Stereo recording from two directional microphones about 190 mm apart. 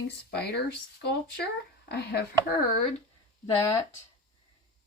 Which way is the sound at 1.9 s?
60° left (ahead or behind).